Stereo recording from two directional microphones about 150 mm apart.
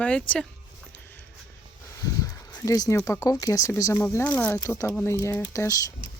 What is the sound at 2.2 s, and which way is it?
Speech, 25° left (ahead or behind).